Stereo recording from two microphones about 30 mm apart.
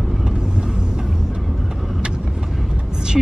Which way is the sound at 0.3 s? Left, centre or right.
Right.